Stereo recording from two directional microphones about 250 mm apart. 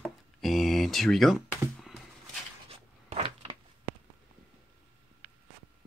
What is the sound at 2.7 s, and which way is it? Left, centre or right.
Cupboard open or close, right.